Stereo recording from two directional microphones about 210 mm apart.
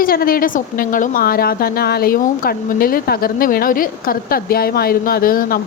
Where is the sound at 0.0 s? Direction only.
45° left (ahead or behind).